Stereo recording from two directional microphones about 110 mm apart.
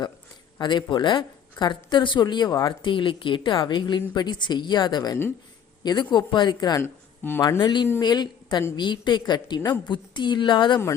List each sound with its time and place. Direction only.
0.6 s a woman's voice: 45° left (ahead or behind)
6.8 s speech: 20° left (ahead or behind)
7.6 s a woman's voice: 45° left (ahead or behind)